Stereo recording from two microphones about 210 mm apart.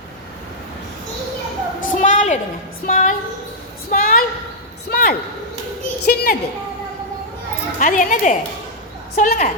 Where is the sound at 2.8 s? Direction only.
40° left (ahead or behind).